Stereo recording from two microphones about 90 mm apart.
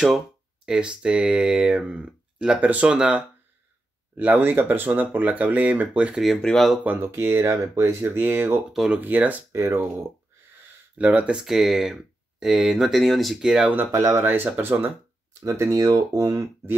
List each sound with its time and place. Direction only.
0.7 s speech: 10° right (ahead or behind)
6.2 s speech: 5° left (ahead or behind)
6.8 s speech: 20° right (ahead or behind)
8.7 s speech: 5° right (ahead or behind)
9.0 s speech: 20° right (ahead or behind)
9.6 s speech: 30° right (ahead or behind)
11.0 s speech: 15° right (ahead or behind)
13.9 s speech: 30° right (ahead or behind)